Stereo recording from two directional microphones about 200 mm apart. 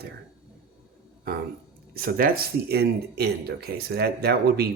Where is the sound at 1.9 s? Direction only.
50° right (ahead or behind).